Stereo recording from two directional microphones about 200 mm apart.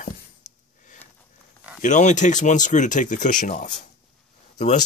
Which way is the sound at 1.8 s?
40° left (ahead or behind).